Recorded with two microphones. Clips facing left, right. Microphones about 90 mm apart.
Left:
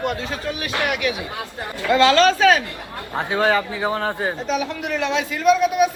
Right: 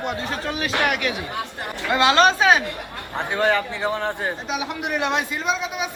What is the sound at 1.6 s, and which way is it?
Speech, 20° right (ahead or behind).